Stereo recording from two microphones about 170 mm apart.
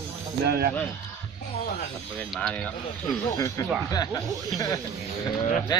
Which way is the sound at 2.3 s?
5° left (ahead or behind).